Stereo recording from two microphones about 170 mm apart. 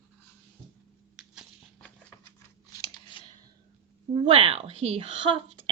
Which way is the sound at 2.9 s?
30° left (ahead or behind).